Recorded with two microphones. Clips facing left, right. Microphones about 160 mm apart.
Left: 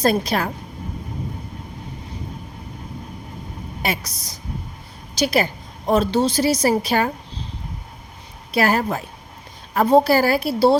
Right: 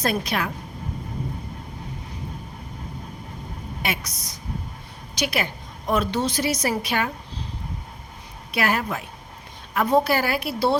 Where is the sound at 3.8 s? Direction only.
35° left (ahead or behind).